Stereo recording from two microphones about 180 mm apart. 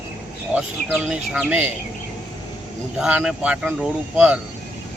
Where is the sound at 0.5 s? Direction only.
Centre (ahead or behind).